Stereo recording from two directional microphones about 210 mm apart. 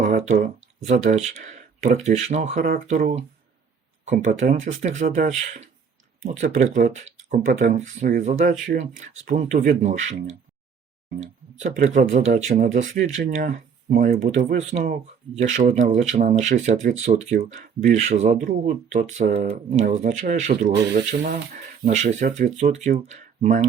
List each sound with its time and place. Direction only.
0.0 s speech: 35° right (ahead or behind)
11.6 s speech: 35° right (ahead or behind)